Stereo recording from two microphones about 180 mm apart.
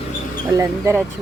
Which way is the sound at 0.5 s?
15° right (ahead or behind).